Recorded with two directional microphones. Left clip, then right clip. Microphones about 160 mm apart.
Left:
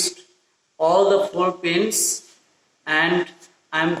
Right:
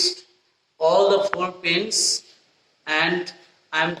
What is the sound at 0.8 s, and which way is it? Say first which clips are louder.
A man's voice: left 1 dB; 20° left (ahead or behind).